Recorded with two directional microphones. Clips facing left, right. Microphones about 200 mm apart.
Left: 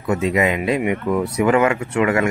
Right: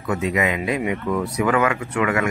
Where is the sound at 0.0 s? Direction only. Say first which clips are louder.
Left 3 dB; 25° left (ahead or behind).